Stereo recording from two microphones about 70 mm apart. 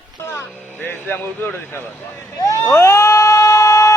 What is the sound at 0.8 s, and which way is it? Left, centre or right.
Speech, left.